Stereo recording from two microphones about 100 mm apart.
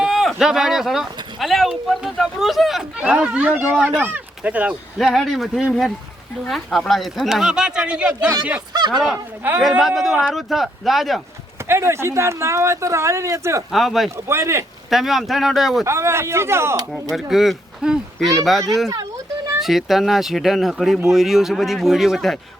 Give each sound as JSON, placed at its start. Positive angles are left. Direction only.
{"t": 0.0, "sound": "speech", "side_deg": 0}
{"t": 4.9, "sound": "speech", "side_deg": 0}
{"t": 9.1, "sound": "speech", "side_deg": -20}
{"t": 9.8, "sound": "speech", "side_deg": 0}
{"t": 11.7, "sound": "speech", "side_deg": -25}
{"t": 13.7, "sound": "speech", "side_deg": 0}
{"t": 14.3, "sound": "speech", "side_deg": -25}
{"t": 14.8, "sound": "speech", "side_deg": 0}
{"t": 15.8, "sound": "speech", "side_deg": -25}
{"t": 17.2, "sound": "speech", "side_deg": 0}
{"t": 18.9, "sound": "a sound", "side_deg": -35}
{"t": 19.6, "sound": "speech", "side_deg": 0}